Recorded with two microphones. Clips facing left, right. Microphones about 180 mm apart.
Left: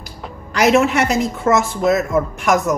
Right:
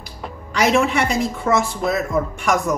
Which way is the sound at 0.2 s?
Centre (ahead or behind).